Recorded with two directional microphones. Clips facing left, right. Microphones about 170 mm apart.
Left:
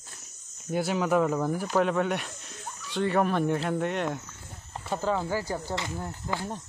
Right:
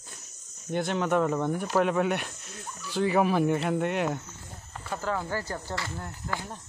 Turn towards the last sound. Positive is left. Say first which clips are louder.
# left 3 dB
turn(degrees=20)  # may be behind; listen again after turning